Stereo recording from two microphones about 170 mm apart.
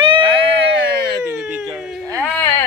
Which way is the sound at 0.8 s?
75° right (ahead or behind).